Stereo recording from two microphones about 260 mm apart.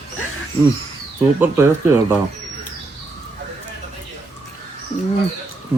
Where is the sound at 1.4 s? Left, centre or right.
Centre.